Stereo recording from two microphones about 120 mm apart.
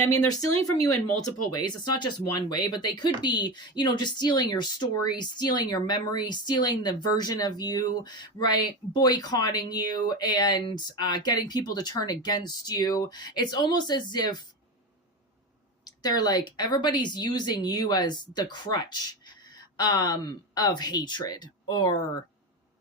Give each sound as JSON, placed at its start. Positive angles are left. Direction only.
{"t": 1.5, "sound": "speech", "side_deg": 35}
{"t": 15.8, "sound": "speech", "side_deg": 35}